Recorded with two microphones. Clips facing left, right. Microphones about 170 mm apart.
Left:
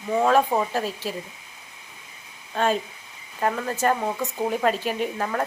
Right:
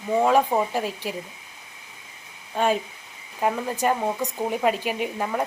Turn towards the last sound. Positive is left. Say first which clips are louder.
# even
turn(degrees=-10)  # may be behind; listen again after turning